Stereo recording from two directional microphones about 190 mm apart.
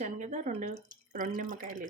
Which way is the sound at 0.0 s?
40° right (ahead or behind).